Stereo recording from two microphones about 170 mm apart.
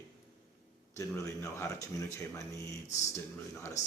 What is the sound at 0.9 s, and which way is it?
Speech, 15° left (ahead or behind).